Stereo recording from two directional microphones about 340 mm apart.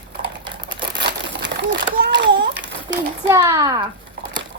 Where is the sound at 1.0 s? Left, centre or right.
Right.